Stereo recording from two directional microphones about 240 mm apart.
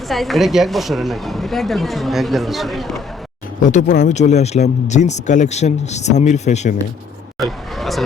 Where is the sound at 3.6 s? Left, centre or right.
Left.